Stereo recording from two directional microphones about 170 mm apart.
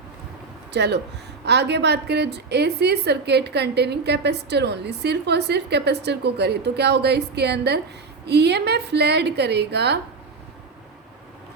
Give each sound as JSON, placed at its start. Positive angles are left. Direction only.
{"t": 0.7, "sound": "a woman's voice", "side_deg": -80}